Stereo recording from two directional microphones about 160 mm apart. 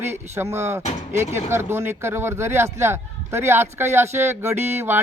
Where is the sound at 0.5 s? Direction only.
20° right (ahead or behind).